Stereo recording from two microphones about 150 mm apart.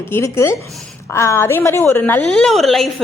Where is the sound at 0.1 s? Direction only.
20° left (ahead or behind).